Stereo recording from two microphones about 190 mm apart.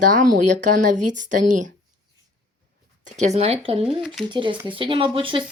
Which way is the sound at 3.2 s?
35° right (ahead or behind).